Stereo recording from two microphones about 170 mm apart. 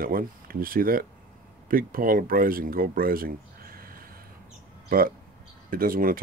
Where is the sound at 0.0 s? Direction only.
60° right (ahead or behind).